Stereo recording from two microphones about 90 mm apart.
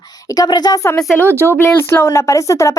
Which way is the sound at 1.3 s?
30° right (ahead or behind).